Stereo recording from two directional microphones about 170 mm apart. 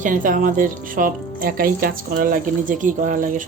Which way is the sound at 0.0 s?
50° right (ahead or behind).